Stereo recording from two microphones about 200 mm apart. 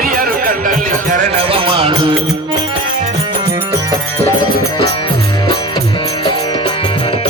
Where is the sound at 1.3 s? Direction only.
30° right (ahead or behind).